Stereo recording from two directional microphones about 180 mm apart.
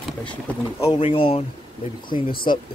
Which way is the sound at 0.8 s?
25° left (ahead or behind).